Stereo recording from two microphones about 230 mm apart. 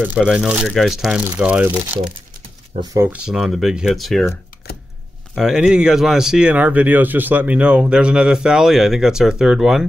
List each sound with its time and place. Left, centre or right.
0.0 s speech: centre
4.6 s chopping: left
5.3 s speech: centre